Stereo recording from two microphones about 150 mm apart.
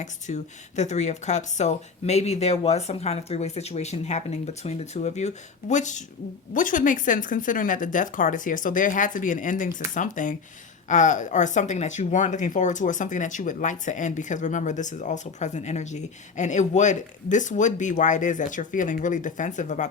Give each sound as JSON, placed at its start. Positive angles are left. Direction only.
{"t": 0.0, "sound": "speech", "side_deg": 50}